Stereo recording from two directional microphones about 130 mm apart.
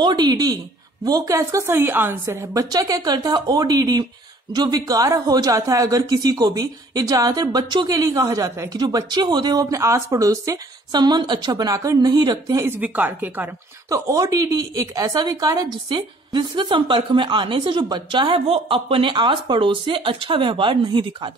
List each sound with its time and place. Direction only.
0.0 s a woman's voice: 35° right (ahead or behind)
12.6 s speech: 15° right (ahead or behind)
13.8 s a woman's voice: 25° right (ahead or behind)